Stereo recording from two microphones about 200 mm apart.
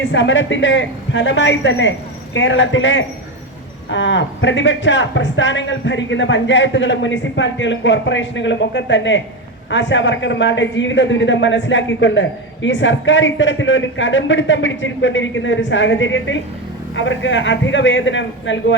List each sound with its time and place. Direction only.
0.0 s speech: 70° left (ahead or behind)